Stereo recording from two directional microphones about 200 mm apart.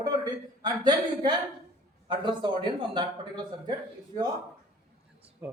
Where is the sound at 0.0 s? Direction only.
20° right (ahead or behind).